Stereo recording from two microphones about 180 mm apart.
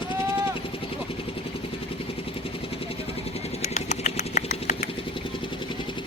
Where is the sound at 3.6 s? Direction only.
40° left (ahead or behind).